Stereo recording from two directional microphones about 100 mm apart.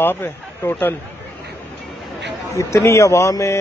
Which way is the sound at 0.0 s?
25° left (ahead or behind).